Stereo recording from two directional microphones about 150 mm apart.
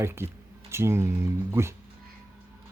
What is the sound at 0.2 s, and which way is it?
Speech, 15° right (ahead or behind).